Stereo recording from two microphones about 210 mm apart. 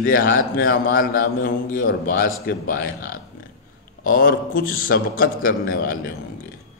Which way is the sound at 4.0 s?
40° left (ahead or behind).